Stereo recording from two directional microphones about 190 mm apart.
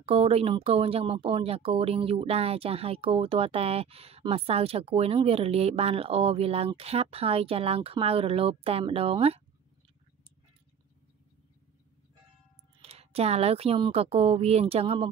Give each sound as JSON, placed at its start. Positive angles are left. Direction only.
{"t": 0.0, "sound": "speech", "side_deg": -30}
{"t": 12.8, "sound": "speech", "side_deg": -30}